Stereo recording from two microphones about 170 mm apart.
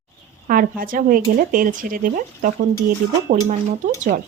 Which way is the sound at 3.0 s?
65° right (ahead or behind).